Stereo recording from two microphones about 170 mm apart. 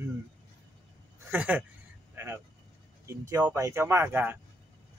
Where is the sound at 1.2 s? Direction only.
10° right (ahead or behind).